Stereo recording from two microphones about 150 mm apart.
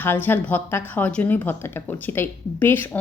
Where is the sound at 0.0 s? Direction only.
15° left (ahead or behind).